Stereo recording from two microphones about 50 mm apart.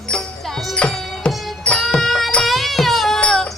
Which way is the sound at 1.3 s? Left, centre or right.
Centre.